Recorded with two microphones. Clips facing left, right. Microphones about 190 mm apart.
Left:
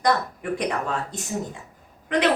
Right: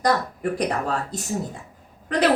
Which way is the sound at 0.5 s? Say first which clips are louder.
Even; 35° right (ahead or behind).